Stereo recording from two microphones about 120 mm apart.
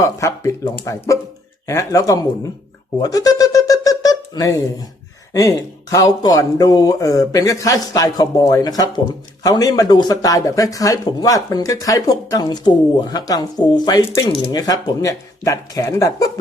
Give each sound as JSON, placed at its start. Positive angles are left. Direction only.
{"t": 0.0, "sound": "speech", "side_deg": 25}
{"t": 3.0, "sound": "a sound", "side_deg": 30}
{"t": 5.3, "sound": "speech", "side_deg": 30}